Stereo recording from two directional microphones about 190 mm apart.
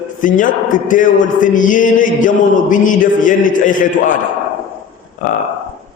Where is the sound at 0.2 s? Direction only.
45° left (ahead or behind).